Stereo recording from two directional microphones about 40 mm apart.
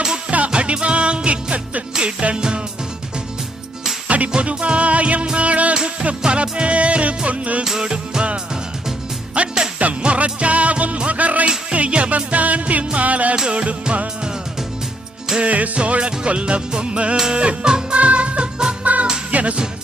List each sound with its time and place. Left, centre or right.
0.5 s music: right
4.3 s music: right
7.8 s music: right
9.4 s music: right
13.5 s music: right
15.4 s music: right